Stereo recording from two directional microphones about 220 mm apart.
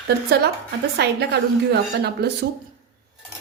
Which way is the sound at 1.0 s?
50° right (ahead or behind).